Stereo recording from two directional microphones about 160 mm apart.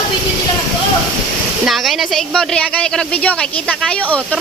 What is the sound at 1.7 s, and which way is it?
Speech, centre (ahead or behind).